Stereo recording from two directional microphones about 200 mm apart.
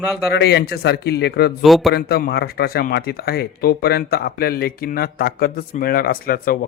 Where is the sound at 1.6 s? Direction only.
Centre (ahead or behind).